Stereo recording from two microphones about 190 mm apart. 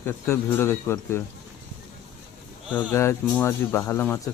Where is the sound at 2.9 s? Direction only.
15° left (ahead or behind).